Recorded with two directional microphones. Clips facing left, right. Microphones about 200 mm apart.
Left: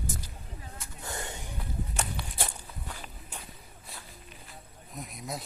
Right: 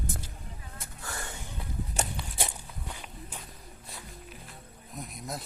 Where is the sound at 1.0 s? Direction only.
20° left (ahead or behind).